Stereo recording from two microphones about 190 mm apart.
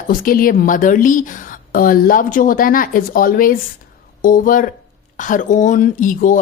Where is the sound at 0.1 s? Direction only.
50° left (ahead or behind).